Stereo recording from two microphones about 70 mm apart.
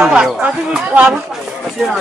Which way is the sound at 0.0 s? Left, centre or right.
Centre.